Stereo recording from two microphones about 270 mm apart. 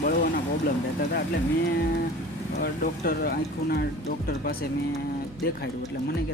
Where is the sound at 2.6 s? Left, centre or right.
Left.